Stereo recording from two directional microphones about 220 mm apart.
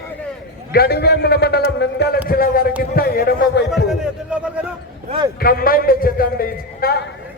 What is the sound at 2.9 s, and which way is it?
Speech, 40° left (ahead or behind).